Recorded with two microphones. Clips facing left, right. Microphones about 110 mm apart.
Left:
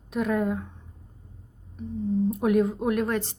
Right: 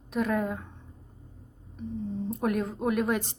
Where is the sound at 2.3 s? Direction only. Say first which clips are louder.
Left 5 dB; centre (ahead or behind).